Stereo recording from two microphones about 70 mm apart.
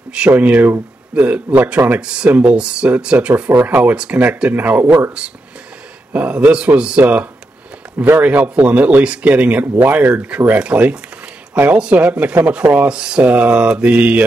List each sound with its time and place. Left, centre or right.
0.4 s a man's voice: right
3.5 s a man's voice: right
6.1 s a man's voice: centre